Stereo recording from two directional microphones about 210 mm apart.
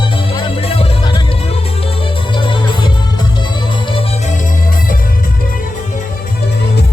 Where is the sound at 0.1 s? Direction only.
25° left (ahead or behind).